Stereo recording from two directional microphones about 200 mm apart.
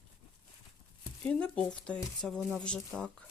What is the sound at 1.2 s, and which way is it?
Speech, 5° left (ahead or behind).